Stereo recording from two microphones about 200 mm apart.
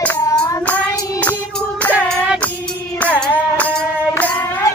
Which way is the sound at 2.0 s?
5° left (ahead or behind).